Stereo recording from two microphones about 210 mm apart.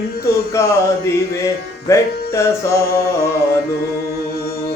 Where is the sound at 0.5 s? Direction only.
15° left (ahead or behind).